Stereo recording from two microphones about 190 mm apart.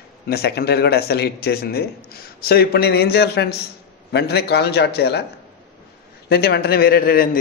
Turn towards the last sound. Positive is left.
turn(degrees=50)  # may be behind; listen again after turning